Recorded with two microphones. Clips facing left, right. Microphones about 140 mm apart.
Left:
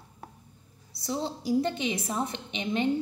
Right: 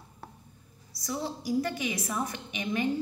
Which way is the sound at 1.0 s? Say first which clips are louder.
Left 2 dB; 25° left (ahead or behind).